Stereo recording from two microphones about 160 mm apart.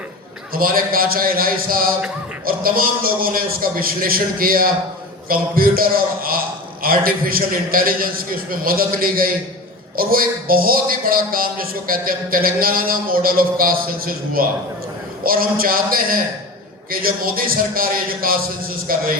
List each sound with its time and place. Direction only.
0.5 s speech: 65° right (ahead or behind)